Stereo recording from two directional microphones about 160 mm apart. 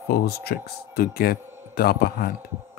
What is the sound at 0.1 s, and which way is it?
Speech, 80° left.